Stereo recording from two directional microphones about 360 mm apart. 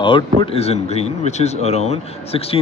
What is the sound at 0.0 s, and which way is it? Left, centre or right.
Speech, centre.